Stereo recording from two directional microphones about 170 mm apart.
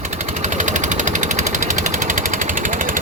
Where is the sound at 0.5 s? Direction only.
45° right (ahead or behind).